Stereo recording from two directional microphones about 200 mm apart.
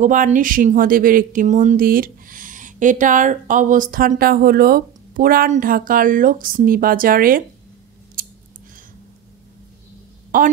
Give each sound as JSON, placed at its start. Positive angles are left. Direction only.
{"t": 0.0, "sound": "speech", "side_deg": -40}
{"t": 8.2, "sound": "scissors", "side_deg": -45}
{"t": 10.3, "sound": "speech", "side_deg": -45}